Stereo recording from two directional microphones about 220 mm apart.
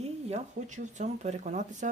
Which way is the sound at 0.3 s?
30° right (ahead or behind).